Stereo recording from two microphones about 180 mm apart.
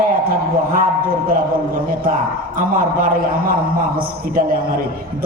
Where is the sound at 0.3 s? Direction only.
50° right (ahead or behind).